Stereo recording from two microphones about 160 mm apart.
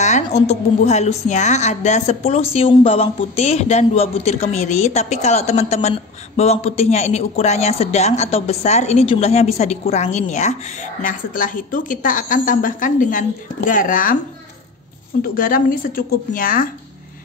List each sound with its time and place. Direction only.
0.0 s a woman's voice: 45° left (ahead or behind)
15.2 s a woman's voice: 60° left (ahead or behind)